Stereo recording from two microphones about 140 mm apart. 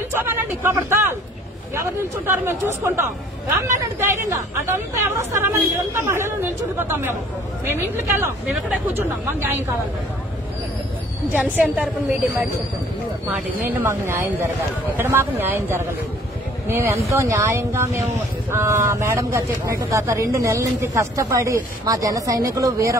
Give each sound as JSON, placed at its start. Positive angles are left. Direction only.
{"t": 0.1, "sound": "speech", "side_deg": -15}
{"t": 11.3, "sound": "speech", "side_deg": -10}
{"t": 13.7, "sound": "speech", "side_deg": -15}